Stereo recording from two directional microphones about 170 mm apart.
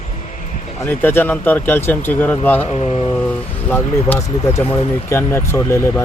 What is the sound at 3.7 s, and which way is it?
Speech, 15° left (ahead or behind).